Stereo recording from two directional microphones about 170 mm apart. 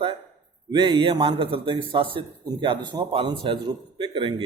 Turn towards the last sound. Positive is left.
turn(degrees=-30)  # may be behind; listen again after turning